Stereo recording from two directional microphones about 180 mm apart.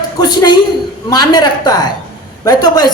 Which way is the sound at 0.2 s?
20° left (ahead or behind).